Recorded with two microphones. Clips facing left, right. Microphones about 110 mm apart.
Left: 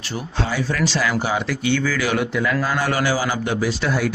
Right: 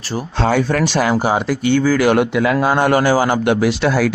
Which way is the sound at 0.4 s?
65° right (ahead or behind).